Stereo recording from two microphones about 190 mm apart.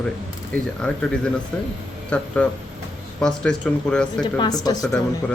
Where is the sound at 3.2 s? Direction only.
5° left (ahead or behind).